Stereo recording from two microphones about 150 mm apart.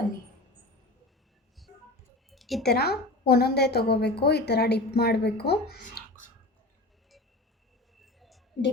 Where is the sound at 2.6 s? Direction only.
90° left.